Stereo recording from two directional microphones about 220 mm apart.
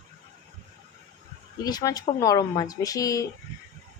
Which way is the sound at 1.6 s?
15° left (ahead or behind).